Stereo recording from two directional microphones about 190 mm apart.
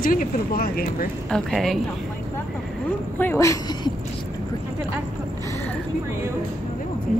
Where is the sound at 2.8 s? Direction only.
10° left (ahead or behind).